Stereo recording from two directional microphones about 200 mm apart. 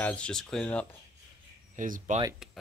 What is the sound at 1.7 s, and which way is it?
Speech, 40° right (ahead or behind).